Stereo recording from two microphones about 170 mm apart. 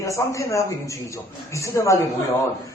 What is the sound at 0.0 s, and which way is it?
A man's voice, 20° left (ahead or behind).